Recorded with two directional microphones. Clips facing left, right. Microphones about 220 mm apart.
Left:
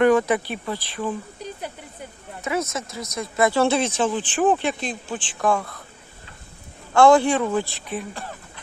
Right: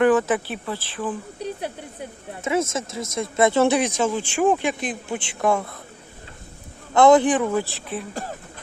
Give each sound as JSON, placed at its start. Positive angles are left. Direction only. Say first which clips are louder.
{"t": 0.0, "sound": "speech", "louder": "left 1 dB", "side_deg": -5}
{"t": 2.4, "sound": "speech", "louder": "right 3 dB", "side_deg": -25}
{"t": 6.9, "sound": "a woman's voice", "louder": "right 1 dB", "side_deg": -20}